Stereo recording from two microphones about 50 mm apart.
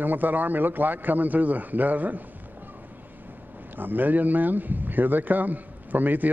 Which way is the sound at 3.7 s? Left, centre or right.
Right.